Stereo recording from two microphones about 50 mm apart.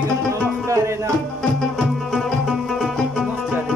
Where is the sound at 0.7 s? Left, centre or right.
Right.